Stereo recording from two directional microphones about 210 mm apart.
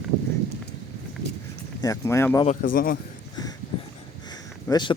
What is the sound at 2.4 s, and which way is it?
Speech, 40° left (ahead or behind).